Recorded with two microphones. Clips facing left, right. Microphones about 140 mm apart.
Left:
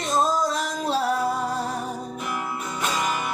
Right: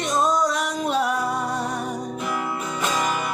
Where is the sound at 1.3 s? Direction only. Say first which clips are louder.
Right 1 dB; 75° right (ahead or behind).